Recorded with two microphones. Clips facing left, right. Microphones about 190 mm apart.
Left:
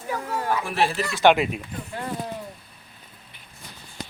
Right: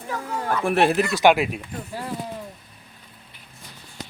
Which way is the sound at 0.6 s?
60° right (ahead or behind).